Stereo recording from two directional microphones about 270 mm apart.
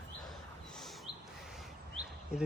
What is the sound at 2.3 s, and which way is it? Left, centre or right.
Speech, centre.